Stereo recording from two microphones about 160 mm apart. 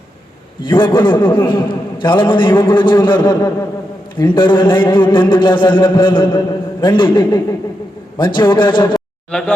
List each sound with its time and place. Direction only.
0.6 s a man's voice: 30° left (ahead or behind)